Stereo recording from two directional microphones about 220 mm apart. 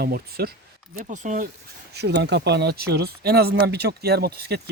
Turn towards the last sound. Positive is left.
turn(degrees=-45)  # may be behind; listen again after turning